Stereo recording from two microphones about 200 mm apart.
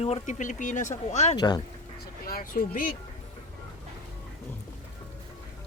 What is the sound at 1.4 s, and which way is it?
Speech, 20° left (ahead or behind).